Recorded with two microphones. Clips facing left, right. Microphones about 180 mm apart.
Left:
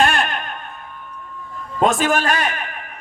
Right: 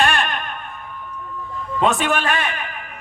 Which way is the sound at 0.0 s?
40° left (ahead or behind).